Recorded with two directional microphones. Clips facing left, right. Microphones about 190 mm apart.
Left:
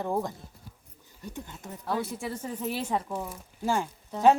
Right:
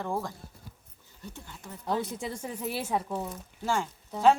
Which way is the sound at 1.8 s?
20° right (ahead or behind).